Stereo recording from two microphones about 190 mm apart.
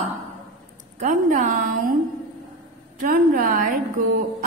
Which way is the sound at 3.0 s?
45° right (ahead or behind).